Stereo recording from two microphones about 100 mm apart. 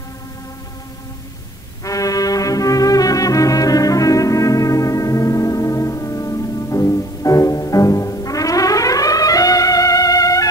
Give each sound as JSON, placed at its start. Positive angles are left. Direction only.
{"t": 1.9, "sound": "brass instrument", "side_deg": 35}